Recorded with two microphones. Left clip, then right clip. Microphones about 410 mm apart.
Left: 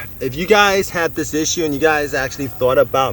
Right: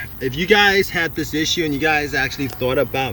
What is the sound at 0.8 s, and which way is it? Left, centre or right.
Speech, left.